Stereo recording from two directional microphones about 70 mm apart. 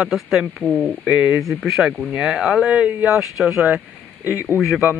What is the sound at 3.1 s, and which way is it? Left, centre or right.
Speech, centre.